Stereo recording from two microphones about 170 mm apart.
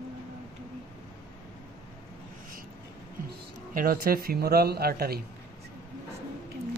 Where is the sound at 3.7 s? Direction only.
55° right (ahead or behind).